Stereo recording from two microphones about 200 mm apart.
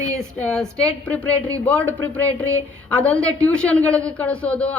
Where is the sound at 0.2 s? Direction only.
5° left (ahead or behind).